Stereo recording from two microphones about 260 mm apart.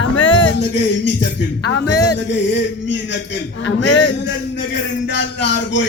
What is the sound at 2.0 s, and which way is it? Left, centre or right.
Speech, left.